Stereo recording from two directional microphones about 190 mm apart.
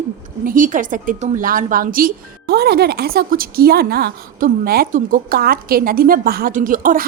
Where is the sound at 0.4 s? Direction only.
45° right (ahead or behind).